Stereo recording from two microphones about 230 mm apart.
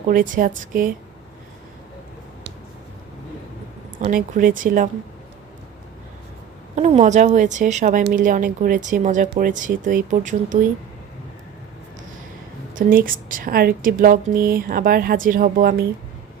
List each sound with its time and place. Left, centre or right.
0.1 s a woman's voice: right
4.0 s a woman's voice: right
6.7 s a woman's voice: right
12.7 s a woman's voice: right